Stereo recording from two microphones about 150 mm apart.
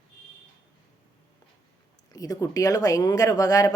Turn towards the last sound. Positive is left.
turn(degrees=25)  # may be behind; listen again after turning